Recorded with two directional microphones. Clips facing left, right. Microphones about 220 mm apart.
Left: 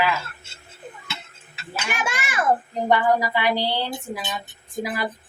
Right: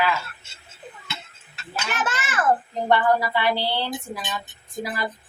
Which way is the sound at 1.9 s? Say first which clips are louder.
Even; 10° left (ahead or behind).